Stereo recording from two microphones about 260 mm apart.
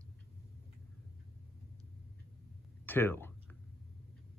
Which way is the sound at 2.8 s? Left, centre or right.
Centre.